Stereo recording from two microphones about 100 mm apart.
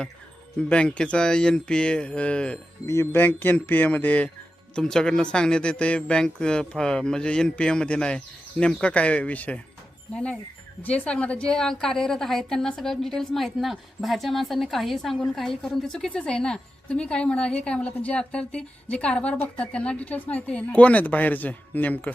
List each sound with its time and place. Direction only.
0.7 s a woman's voice: 10° left (ahead or behind)
2.8 s speech: 30° left (ahead or behind)
4.7 s a woman's voice: 5° left (ahead or behind)
10.8 s a woman's voice: 15° left (ahead or behind)